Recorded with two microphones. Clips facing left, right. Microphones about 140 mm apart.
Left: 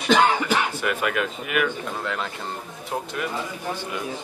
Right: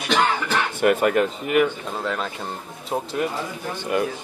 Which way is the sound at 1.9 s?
15° right (ahead or behind).